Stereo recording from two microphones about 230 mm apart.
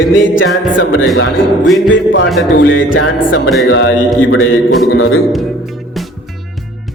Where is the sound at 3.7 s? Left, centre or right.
Left.